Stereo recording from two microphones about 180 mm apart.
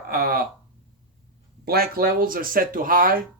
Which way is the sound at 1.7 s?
55° right (ahead or behind).